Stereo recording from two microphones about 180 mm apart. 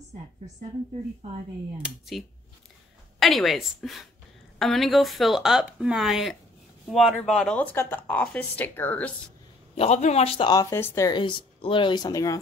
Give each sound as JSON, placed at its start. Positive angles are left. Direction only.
{"t": 1.8, "sound": "speech", "side_deg": 0}
{"t": 9.8, "sound": "speech", "side_deg": 40}